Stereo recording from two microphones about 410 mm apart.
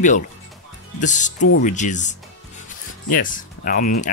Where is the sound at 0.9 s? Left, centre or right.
Centre.